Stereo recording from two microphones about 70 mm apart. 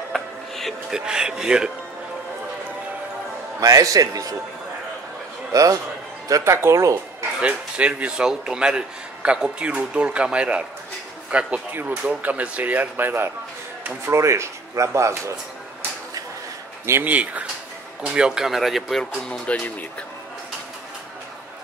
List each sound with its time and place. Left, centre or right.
0.1 s music: centre
0.9 s speech: centre
3.6 s a man's voice: right
5.5 s a man's voice: right
6.5 s speech: right
7.3 s speech: centre
14.0 s speech: right
17.0 s speech: right; by 19.0 s centre
19.2 s speech: centre